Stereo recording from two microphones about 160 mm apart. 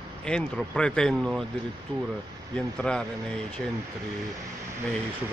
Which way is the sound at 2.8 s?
5° left (ahead or behind).